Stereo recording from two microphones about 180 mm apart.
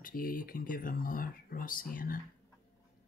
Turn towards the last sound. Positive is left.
turn(degrees=50)  # may be behind; listen again after turning